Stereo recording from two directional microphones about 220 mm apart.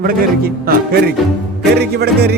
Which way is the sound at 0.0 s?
45° right (ahead or behind).